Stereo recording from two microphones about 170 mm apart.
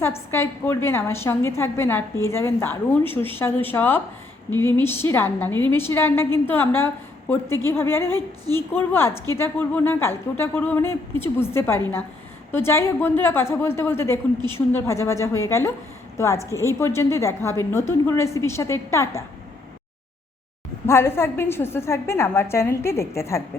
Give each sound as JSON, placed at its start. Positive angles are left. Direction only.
{"t": 0.0, "sound": "a woman's voice", "side_deg": 15}
{"t": 20.8, "sound": "a woman's voice", "side_deg": 15}